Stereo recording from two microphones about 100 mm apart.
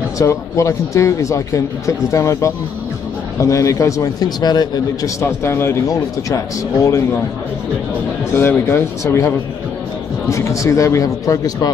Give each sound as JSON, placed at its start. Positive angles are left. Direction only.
{"t": 0.2, "sound": "speech", "side_deg": 30}
{"t": 5.2, "sound": "speech", "side_deg": 25}
{"t": 8.4, "sound": "speech", "side_deg": 25}
{"t": 10.3, "sound": "speech", "side_deg": 30}